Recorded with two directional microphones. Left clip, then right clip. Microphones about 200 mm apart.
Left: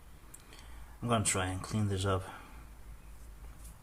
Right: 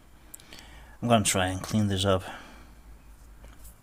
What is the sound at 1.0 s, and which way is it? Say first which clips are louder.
A man's voice: right 8 dB; 50° right (ahead or behind).